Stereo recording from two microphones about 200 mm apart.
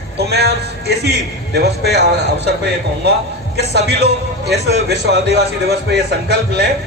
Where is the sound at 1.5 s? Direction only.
50° right (ahead or behind).